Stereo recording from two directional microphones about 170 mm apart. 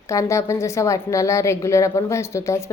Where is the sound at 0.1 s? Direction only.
15° left (ahead or behind).